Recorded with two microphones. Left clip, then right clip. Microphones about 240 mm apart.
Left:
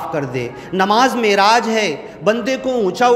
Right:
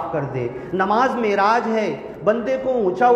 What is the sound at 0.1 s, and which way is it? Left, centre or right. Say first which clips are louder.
A man's voice: left 2 dB; left.